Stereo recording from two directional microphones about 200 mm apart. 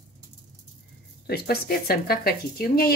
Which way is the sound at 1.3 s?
50° left (ahead or behind).